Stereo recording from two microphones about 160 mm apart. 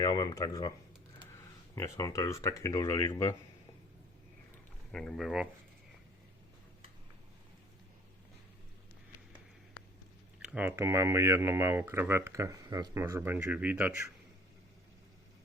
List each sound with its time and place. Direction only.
0.0 s speech: 25° left (ahead or behind)
1.7 s speech: 20° left (ahead or behind)
4.9 s speech: 5° left (ahead or behind)
10.4 s speech: 10° right (ahead or behind)